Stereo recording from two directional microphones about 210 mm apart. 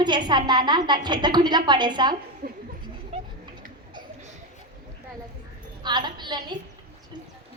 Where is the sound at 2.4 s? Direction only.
50° right (ahead or behind).